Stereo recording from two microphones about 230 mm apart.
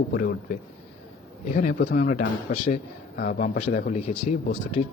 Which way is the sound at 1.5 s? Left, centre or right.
Left.